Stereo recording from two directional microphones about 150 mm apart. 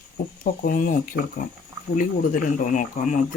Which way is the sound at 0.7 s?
65° left (ahead or behind).